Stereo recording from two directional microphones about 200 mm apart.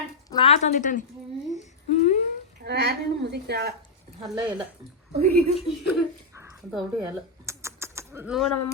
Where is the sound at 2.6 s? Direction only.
55° right (ahead or behind).